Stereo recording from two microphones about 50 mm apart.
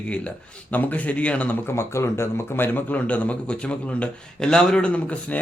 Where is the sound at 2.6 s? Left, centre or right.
Left; by 4.9 s centre.